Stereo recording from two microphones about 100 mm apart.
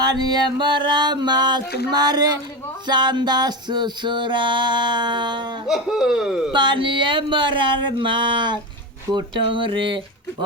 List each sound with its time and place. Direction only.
0.0 s music: 45° right (ahead or behind)
5.6 s speech: 5° right (ahead or behind)
6.5 s music: 50° right (ahead or behind)
9.1 s a sound: 55° right (ahead or behind)